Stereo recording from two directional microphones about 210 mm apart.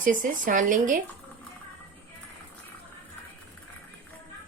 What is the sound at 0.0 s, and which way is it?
A woman's voice, 40° right (ahead or behind).